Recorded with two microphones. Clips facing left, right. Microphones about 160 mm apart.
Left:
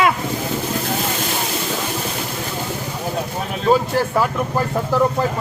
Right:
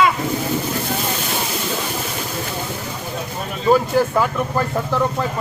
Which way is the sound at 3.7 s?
Centre (ahead or behind).